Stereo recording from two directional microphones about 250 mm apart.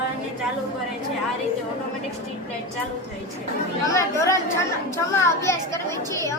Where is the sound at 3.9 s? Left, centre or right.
Centre.